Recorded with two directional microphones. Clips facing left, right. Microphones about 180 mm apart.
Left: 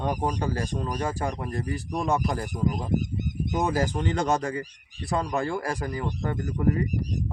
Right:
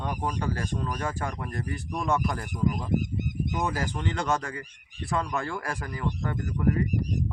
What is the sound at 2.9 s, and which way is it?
Goose, 50° right (ahead or behind).